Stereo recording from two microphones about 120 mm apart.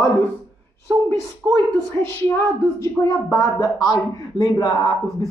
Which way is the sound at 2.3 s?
15° left (ahead or behind).